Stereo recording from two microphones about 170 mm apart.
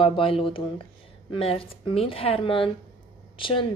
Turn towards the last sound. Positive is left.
turn(degrees=30)  # may be behind; listen again after turning